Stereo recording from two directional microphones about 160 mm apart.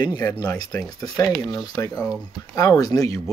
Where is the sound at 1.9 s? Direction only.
5° right (ahead or behind).